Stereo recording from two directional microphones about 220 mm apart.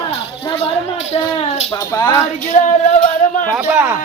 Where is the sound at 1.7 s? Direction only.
20° left (ahead or behind).